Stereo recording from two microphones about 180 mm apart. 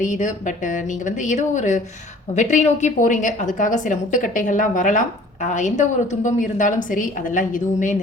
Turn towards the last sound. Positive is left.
turn(degrees=45)  # may be behind; listen again after turning